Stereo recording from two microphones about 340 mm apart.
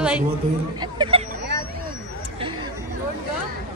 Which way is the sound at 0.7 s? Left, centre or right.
Centre.